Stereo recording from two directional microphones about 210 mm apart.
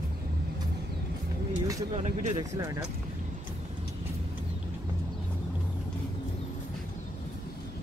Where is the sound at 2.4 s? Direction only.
15° right (ahead or behind).